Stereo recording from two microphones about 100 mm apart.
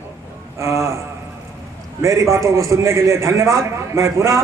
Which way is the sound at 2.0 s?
30° right (ahead or behind).